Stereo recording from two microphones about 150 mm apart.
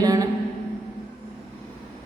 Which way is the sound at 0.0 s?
25° right (ahead or behind).